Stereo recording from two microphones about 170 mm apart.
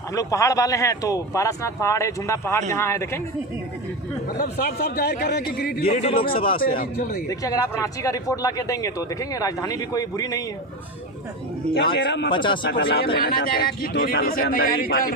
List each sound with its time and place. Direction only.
0.1 s speech: 20° left (ahead or behind)
4.3 s speech: 60° left (ahead or behind)
5.9 s a man's voice: 35° left (ahead or behind)
6.6 s speech: 55° left (ahead or behind)
7.3 s speech: 20° left (ahead or behind)
11.9 s speech: 90° left
12.3 s speech: 30° left (ahead or behind)
12.6 s speech: 70° left (ahead or behind)